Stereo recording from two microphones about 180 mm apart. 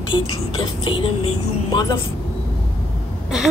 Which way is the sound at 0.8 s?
25° left (ahead or behind).